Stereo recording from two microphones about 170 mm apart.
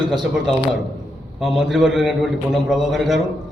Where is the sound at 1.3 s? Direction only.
Centre (ahead or behind).